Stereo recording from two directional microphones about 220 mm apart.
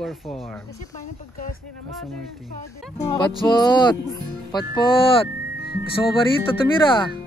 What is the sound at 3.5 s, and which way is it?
Music, 20° left (ahead or behind).